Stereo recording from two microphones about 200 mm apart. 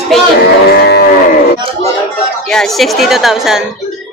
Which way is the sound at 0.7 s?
50° left (ahead or behind).